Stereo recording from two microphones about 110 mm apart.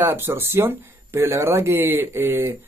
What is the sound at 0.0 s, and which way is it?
Speech, 20° right (ahead or behind).